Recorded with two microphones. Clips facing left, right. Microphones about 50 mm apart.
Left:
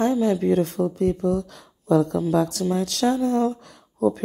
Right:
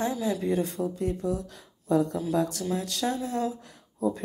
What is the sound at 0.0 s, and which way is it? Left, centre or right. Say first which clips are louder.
Speech: left 8 dB; left.